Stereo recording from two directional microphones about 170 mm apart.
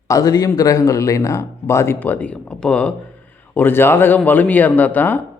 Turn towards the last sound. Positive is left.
turn(degrees=10)  # may be behind; listen again after turning